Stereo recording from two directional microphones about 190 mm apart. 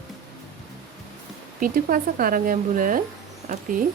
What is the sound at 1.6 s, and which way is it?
Speech, 45° right (ahead or behind).